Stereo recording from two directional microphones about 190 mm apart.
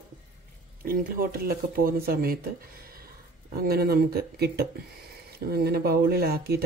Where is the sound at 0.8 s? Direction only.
50° right (ahead or behind).